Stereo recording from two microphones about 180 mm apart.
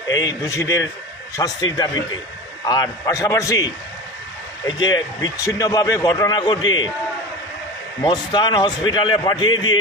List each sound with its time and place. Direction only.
0.1 s a man's voice: 20° left (ahead or behind)
8.0 s a man's voice: 25° left (ahead or behind)